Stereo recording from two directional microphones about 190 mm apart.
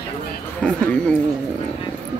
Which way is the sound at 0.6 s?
5° left (ahead or behind).